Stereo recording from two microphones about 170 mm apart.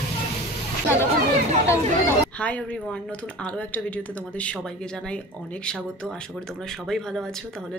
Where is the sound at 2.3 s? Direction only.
10° left (ahead or behind).